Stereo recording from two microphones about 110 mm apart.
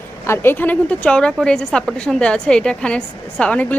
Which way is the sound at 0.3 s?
20° left (ahead or behind).